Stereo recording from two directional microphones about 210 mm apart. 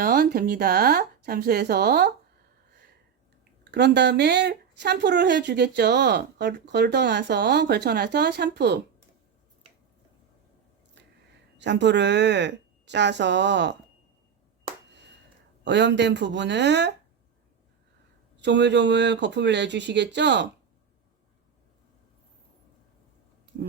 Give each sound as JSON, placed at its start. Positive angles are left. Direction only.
{"t": 0.0, "sound": "speech", "side_deg": -40}
{"t": 3.6, "sound": "speech", "side_deg": -55}
{"t": 11.0, "sound": "a sound", "side_deg": -55}
{"t": 11.5, "sound": "a woman's voice", "side_deg": -55}
{"t": 15.6, "sound": "a woman's voice", "side_deg": -55}
{"t": 18.3, "sound": "a woman's voice", "side_deg": -55}